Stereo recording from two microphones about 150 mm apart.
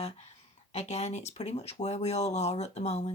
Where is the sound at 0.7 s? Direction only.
50° left (ahead or behind).